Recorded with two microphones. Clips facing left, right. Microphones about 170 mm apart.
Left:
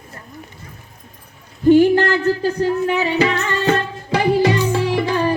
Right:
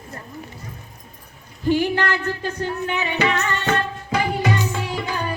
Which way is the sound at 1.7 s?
45° left (ahead or behind).